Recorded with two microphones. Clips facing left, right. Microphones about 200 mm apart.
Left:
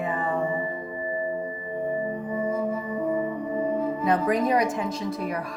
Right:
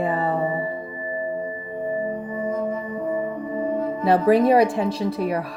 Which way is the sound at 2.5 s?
10° left (ahead or behind).